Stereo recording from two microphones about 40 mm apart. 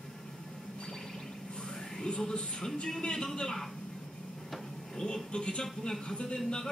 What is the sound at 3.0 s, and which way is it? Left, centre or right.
Speech, left.